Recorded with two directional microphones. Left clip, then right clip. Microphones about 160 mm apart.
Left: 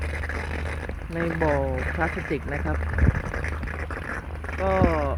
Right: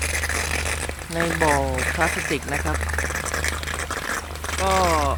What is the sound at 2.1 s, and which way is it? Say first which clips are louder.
Speech: right 6 dB; 30° left (ahead or behind).